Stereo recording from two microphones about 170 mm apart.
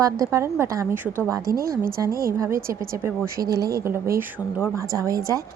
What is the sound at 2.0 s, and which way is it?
Speech, 20° right (ahead or behind).